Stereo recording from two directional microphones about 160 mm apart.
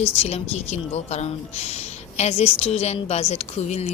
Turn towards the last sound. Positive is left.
turn(degrees=45)  # may be behind; listen again after turning